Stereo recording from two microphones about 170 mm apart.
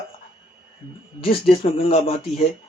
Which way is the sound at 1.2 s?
35° left (ahead or behind).